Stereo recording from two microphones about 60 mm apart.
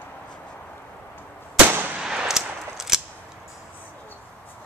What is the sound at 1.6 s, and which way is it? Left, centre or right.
Gunshot, right.